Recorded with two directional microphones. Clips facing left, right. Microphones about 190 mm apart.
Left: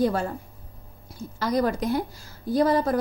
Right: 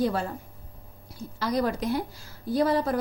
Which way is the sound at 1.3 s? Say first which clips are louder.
Left 3 dB; 45° left (ahead or behind).